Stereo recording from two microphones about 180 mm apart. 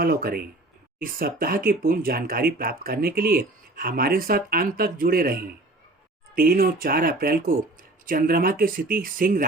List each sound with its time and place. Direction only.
0.0 s speech: 55° right (ahead or behind)